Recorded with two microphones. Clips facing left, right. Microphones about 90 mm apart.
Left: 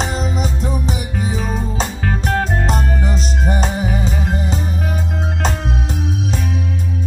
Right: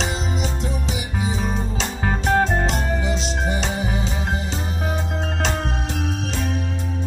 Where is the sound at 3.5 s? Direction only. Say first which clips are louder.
Left 7 dB; 45° left (ahead or behind).